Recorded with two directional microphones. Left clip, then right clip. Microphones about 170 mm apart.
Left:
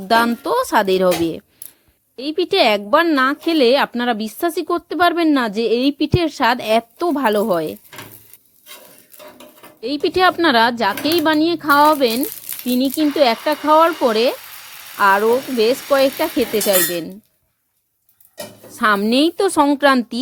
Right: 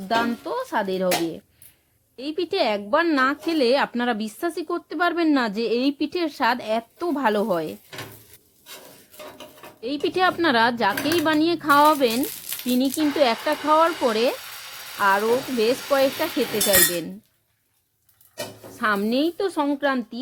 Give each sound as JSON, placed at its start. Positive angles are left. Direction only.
{"t": 0.1, "sound": "speech", "side_deg": 30}
{"t": 2.1, "sound": "a woman's voice", "side_deg": 20}
{"t": 9.8, "sound": "a woman's voice", "side_deg": 20}
{"t": 18.8, "sound": "a woman's voice", "side_deg": 20}